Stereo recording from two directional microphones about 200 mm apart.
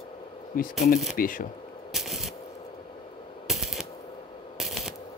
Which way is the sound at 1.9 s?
Centre (ahead or behind).